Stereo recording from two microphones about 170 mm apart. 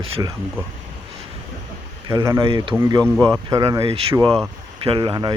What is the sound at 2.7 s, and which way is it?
Speech, 15° right (ahead or behind).